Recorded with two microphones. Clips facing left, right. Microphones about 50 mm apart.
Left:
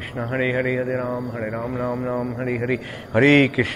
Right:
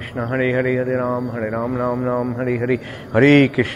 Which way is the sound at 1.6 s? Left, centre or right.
Right.